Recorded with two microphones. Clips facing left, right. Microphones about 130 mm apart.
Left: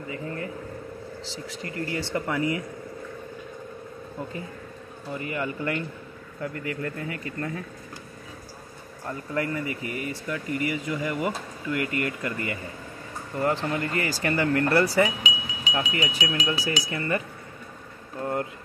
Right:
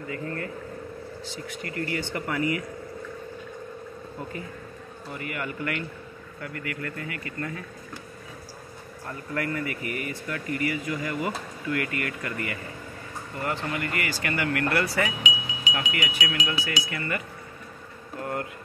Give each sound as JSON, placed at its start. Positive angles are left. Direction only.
{"t": 0.1, "sound": "speech", "side_deg": 20}
{"t": 1.8, "sound": "speech", "side_deg": 25}
{"t": 5.2, "sound": "speech", "side_deg": 25}
{"t": 9.3, "sound": "speech", "side_deg": 20}
{"t": 15.2, "sound": "wind chime", "side_deg": 30}
{"t": 18.2, "sound": "a sound", "side_deg": 25}